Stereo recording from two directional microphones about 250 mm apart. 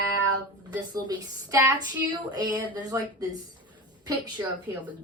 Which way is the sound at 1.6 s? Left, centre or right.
Centre.